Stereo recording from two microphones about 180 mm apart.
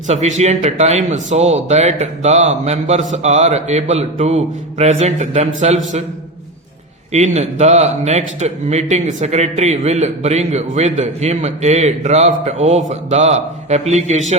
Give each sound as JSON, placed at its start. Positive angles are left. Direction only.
{"t": 0.1, "sound": "speech", "side_deg": -40}
{"t": 7.1, "sound": "speech", "side_deg": -40}